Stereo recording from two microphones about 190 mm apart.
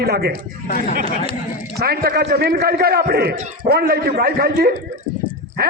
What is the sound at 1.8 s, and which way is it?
A man's voice, 55° right (ahead or behind).